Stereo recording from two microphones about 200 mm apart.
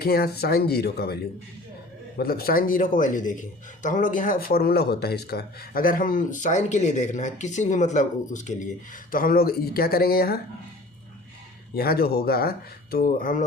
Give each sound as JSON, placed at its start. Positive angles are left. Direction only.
{"t": 0.0, "sound": "a man's voice", "side_deg": 50}
{"t": 11.7, "sound": "speech", "side_deg": 50}